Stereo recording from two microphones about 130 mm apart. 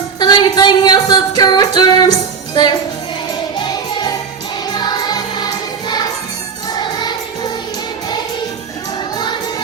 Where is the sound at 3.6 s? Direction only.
30° left (ahead or behind).